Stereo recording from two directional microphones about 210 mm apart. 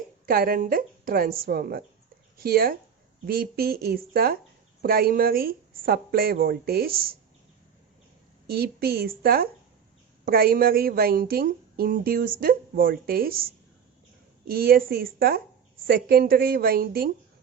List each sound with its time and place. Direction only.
0.3 s speech: 45° right (ahead or behind)
8.4 s speech: 45° right (ahead or behind)